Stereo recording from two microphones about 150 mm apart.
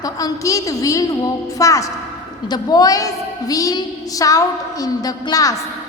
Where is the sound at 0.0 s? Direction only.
25° left (ahead or behind).